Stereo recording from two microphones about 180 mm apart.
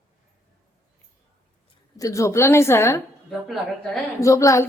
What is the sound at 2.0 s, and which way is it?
A woman's voice, 20° left (ahead or behind).